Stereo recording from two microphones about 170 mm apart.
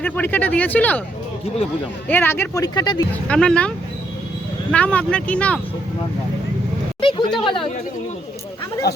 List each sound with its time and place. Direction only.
0.0 s speech: 10° left (ahead or behind)
2.0 s speech: 10° left (ahead or behind)
3.2 s speech: 5° left (ahead or behind)
4.7 s speech: 5° left (ahead or behind)
7.0 s a sound: 30° left (ahead or behind)
7.3 s speech: 30° left (ahead or behind)